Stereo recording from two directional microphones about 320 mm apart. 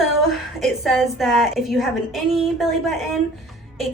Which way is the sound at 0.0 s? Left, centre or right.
Centre.